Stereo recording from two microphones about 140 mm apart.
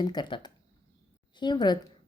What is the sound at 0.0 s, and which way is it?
A woman's voice, 30° left (ahead or behind).